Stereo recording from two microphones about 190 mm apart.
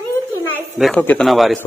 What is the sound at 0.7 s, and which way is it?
Speech, centre (ahead or behind).